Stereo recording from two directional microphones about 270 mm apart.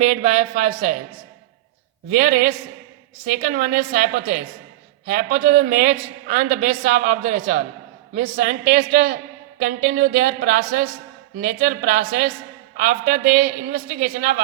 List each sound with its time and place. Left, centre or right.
0.0 s a man's voice: right
2.0 s a man's voice: right